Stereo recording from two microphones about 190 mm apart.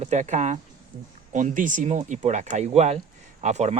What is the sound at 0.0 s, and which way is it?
Speech, 40° right (ahead or behind).